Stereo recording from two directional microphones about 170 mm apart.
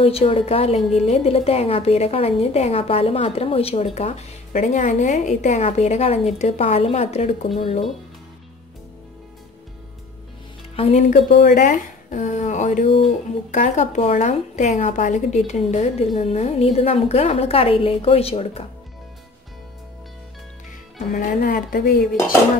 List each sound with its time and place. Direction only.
0.0 s a woman's voice: 35° left (ahead or behind)
10.8 s a woman's voice: 40° left (ahead or behind)
13.6 s a woman's voice: 45° left (ahead or behind)
21.1 s a woman's voice: 55° left (ahead or behind)